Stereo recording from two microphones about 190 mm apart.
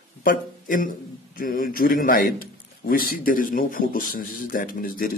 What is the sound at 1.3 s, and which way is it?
A man's voice, 45° left (ahead or behind).